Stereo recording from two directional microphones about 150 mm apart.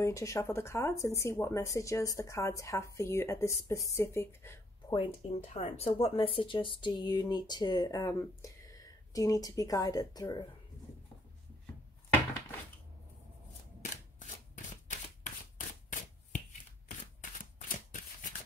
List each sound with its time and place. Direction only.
0.0 s speech: 20° left (ahead or behind)
4.9 s speech: 40° left (ahead or behind)
14.2 s shuffling cards: 55° left (ahead or behind)